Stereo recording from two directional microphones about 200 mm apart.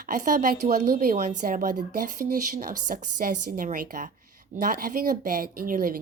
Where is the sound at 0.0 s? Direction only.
40° right (ahead or behind).